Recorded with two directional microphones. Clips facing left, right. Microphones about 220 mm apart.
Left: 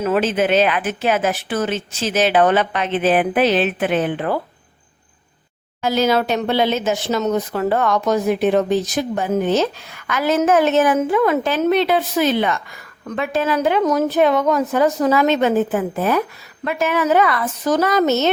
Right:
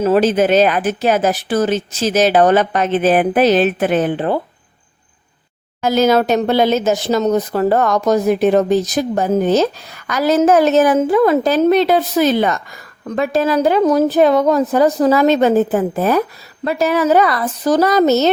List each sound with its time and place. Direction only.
0.0 s speech: 35° right (ahead or behind)
5.8 s speech: 45° right (ahead or behind)